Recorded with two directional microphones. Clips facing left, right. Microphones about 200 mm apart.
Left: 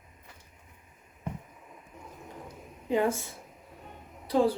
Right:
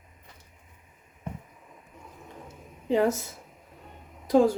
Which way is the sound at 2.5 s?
35° right (ahead or behind).